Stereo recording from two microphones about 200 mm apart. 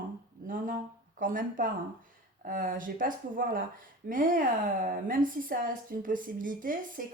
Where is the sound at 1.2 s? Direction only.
45° right (ahead or behind).